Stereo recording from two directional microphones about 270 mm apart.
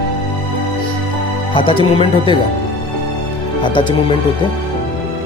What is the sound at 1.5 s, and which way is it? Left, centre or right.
Speech, centre.